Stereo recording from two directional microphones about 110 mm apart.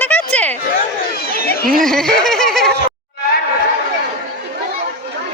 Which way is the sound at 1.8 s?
5° left (ahead or behind).